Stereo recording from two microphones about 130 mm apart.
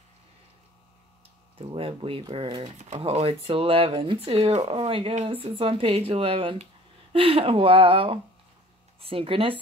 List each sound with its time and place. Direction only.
1.6 s speech: 45° right (ahead or behind)
3.0 s speech: 50° right (ahead or behind)